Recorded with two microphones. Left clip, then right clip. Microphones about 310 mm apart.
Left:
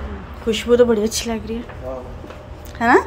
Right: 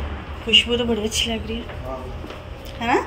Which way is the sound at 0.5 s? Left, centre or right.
Centre.